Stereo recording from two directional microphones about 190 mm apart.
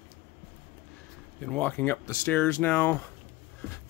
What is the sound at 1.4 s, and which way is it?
Speech, 5° left (ahead or behind).